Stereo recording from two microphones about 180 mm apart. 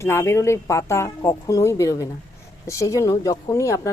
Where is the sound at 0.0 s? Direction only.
15° left (ahead or behind).